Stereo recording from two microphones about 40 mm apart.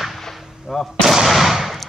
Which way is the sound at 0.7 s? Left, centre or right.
Centre.